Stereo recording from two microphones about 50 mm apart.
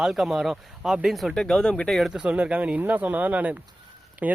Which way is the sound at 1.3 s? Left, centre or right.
Centre.